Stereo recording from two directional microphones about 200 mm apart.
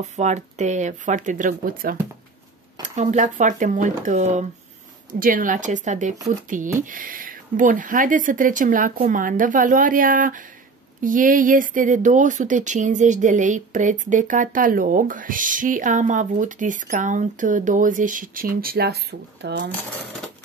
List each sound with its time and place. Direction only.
0.0 s speech: 35° right (ahead or behind)
3.0 s speech: 35° right (ahead or behind); by 19.7 s 60° right (ahead or behind)